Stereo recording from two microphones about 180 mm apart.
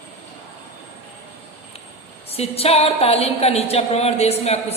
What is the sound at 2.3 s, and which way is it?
A woman's voice, 35° left (ahead or behind).